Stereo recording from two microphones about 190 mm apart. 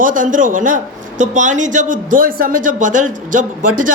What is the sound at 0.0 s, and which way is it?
Speech, 45° right (ahead or behind).